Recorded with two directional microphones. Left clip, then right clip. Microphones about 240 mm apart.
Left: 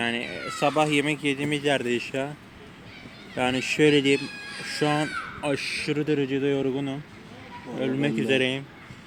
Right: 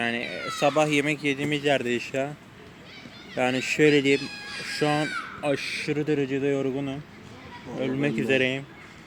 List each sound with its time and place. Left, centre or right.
0.0 s a sound: centre
0.5 s speech: centre
3.3 s speech: centre
4.2 s speech: right
4.7 s speech: centre